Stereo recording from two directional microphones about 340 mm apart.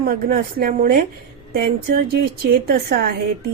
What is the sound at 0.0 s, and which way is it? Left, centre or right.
Speech, right.